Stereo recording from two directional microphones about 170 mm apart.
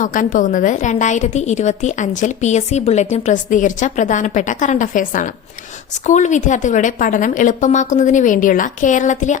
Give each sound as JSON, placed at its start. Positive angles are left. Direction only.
{"t": 0.0, "sound": "a woman's voice", "side_deg": 50}